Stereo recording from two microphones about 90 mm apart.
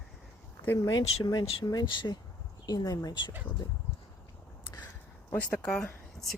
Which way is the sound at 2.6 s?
45° left (ahead or behind).